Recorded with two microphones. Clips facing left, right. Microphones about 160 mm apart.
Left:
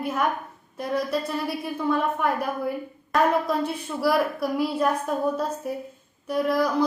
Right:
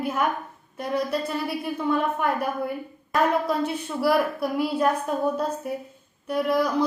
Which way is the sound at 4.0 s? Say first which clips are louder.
Right 1 dB; centre (ahead or behind).